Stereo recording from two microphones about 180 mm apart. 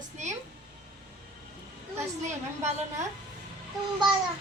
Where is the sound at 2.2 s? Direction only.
40° right (ahead or behind).